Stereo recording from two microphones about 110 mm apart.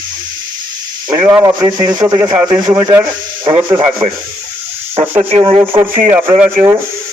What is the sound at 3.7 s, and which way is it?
Speech, 50° right (ahead or behind).